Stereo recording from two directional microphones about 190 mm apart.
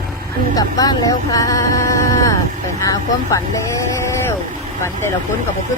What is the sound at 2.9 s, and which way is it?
Vehicle, 15° left (ahead or behind).